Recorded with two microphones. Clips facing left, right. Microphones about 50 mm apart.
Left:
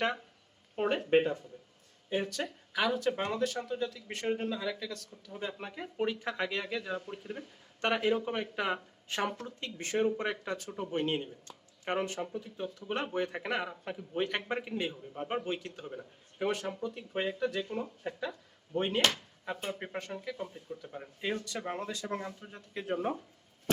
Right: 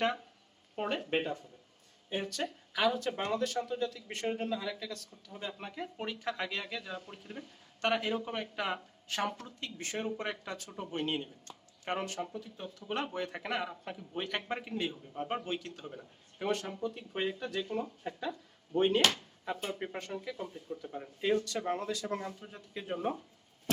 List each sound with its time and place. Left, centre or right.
0.9 s a man's voice: left
9.0 s speech: left
10.2 s a man's voice: centre
18.0 s a man's voice: centre